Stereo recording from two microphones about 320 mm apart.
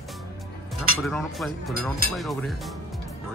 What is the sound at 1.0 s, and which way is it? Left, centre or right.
Speech, centre.